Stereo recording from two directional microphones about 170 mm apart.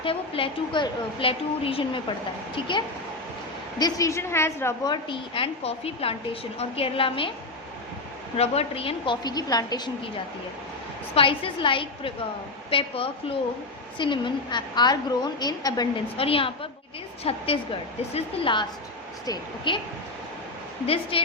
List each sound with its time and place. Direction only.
0.0 s a woman's voice: 30° left (ahead or behind)
3.8 s a woman's voice: 20° left (ahead or behind)
8.4 s a woman's voice: 35° left (ahead or behind)
11.1 s a woman's voice: 30° left (ahead or behind)
16.1 s a woman's voice: 35° left (ahead or behind)
20.8 s a woman's voice: 35° left (ahead or behind)